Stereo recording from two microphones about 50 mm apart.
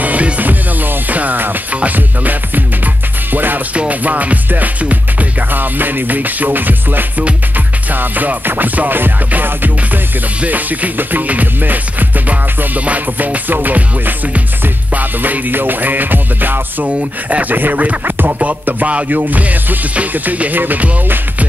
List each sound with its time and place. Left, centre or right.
0.0 s music: right
3.7 s music: right
16.8 s speech: right
18.0 s music: right
18.4 s music: right